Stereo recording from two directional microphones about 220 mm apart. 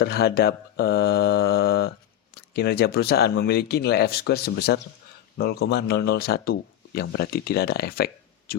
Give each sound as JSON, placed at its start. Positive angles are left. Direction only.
{"t": 0.0, "sound": "speech", "side_deg": 45}